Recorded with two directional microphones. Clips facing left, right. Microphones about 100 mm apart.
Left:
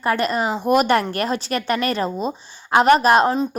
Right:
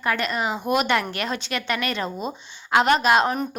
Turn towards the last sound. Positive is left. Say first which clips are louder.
# left 4 dB
turn(degrees=40)  # may be behind; listen again after turning